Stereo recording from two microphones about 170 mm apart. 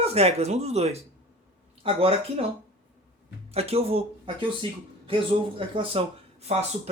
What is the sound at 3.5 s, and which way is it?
Speech, 35° right (ahead or behind).